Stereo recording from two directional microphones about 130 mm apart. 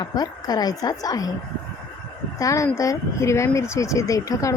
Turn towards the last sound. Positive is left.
turn(degrees=25)  # may be behind; listen again after turning